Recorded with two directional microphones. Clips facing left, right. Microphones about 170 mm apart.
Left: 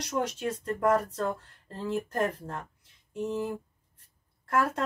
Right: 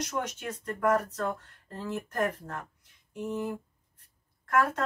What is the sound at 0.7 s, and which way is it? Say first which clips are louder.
Speech: even; 30° left (ahead or behind).